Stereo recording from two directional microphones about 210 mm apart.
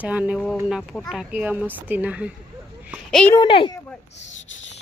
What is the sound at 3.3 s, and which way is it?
Speech, 20° left (ahead or behind).